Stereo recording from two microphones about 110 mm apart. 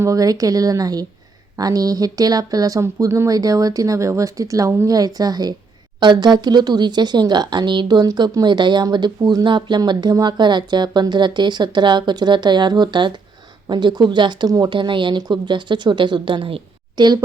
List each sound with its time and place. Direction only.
0.0 s speech: 30° right (ahead or behind); by 16.6 s 50° right (ahead or behind)
17.0 s speech: 40° right (ahead or behind)